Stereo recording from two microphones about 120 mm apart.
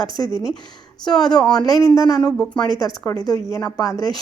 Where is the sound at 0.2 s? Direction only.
30° left (ahead or behind).